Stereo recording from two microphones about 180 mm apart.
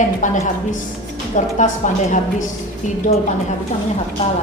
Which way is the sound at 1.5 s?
45° left (ahead or behind).